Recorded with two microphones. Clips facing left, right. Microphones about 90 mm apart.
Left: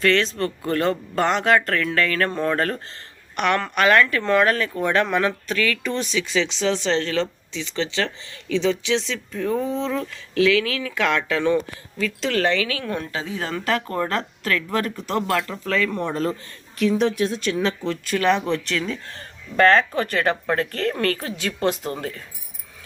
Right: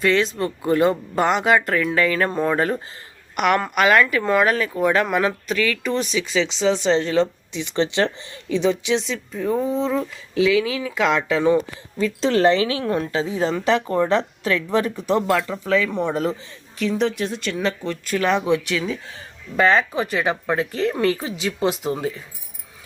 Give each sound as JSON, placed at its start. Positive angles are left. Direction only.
{"t": 0.0, "sound": "speech", "side_deg": -10}
{"t": 12.0, "sound": "a woman's voice", "side_deg": -30}